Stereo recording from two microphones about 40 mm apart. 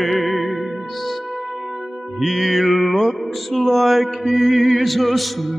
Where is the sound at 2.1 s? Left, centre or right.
Centre.